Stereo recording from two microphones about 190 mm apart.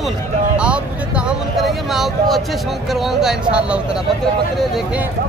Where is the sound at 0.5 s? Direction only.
5° right (ahead or behind).